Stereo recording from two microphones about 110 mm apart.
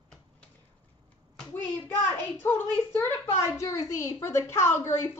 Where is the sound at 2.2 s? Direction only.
20° left (ahead or behind).